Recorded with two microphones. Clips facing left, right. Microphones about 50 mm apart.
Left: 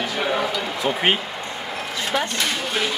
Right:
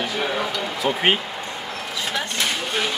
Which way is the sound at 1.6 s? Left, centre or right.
Centre.